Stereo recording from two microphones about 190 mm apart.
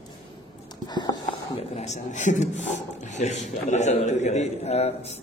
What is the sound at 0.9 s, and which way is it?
Speech, 20° left (ahead or behind).